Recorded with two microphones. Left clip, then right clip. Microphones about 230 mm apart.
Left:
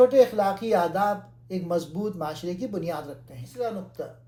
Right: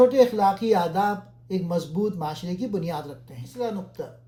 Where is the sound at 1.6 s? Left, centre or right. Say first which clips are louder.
Even; right.